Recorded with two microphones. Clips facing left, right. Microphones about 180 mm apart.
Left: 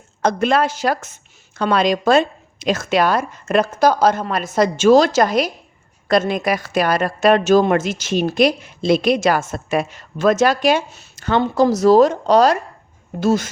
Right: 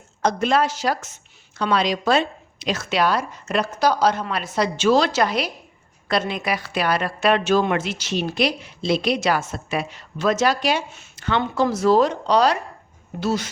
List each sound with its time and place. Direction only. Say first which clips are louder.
0.2 s a woman's voice: left 3 dB; 55° left (ahead or behind)